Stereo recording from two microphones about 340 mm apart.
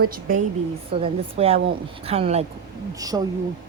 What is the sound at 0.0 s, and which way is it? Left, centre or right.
A woman's voice, right.